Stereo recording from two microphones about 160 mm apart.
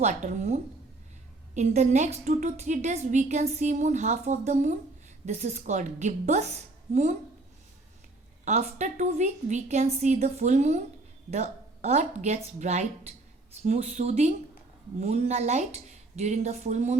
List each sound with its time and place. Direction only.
0.0 s a woman's voice: 45° right (ahead or behind)
8.4 s a woman's voice: 45° right (ahead or behind)